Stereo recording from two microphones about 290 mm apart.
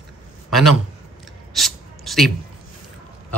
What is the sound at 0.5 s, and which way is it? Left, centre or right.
Speech, centre.